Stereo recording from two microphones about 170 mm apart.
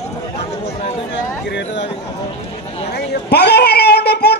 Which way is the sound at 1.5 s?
90° left.